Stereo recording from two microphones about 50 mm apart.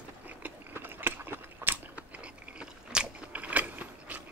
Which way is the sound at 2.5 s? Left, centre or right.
Centre.